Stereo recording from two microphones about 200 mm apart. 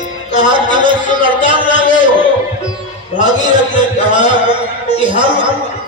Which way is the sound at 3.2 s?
20° right (ahead or behind).